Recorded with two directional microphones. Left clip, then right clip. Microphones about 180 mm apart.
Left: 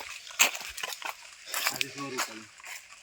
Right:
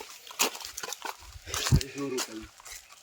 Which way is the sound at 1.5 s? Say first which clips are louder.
Left 1 dB; 10° left (ahead or behind).